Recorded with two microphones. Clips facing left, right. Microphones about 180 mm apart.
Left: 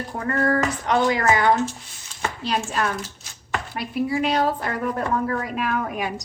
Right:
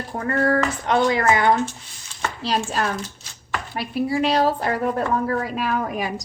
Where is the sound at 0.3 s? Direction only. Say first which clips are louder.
Right 2 dB; 30° right (ahead or behind).